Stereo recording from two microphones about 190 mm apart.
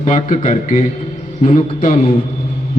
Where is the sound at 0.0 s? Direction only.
40° left (ahead or behind).